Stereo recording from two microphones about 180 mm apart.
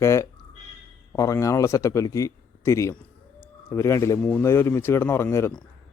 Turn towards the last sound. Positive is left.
turn(degrees=15)  # may be behind; listen again after turning